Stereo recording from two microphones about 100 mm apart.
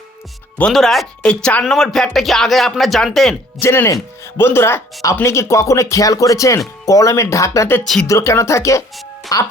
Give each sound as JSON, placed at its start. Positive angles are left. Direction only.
{"t": 0.7, "sound": "speech", "side_deg": 0}
{"t": 3.6, "sound": "speech", "side_deg": 25}